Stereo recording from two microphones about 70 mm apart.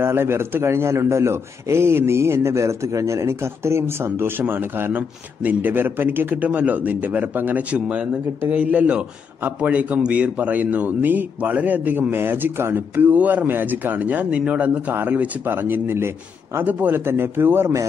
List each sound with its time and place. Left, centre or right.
0.0 s a man's voice: right